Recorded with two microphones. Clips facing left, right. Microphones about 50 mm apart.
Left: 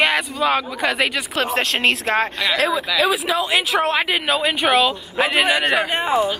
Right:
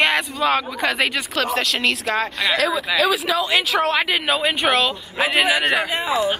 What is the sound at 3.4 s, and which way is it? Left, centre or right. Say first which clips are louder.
Speech: even; centre.